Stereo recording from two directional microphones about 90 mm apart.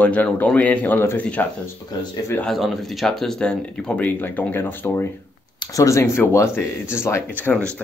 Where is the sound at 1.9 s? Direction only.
50° left (ahead or behind).